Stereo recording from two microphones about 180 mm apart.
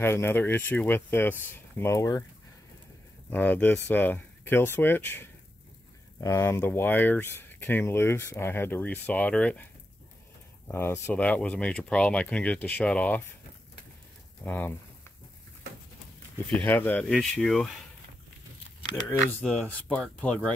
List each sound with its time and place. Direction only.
0.0 s speech: 15° left (ahead or behind)
3.3 s speech: 10° left (ahead or behind)
10.7 s speech: 15° left (ahead or behind)
14.4 s speech: 10° left (ahead or behind)
16.4 s speech: 5° left (ahead or behind)
19.4 s speech: 5° left (ahead or behind)